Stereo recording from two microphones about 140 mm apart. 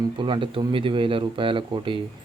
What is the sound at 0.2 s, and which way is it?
Speech, 35° right (ahead or behind).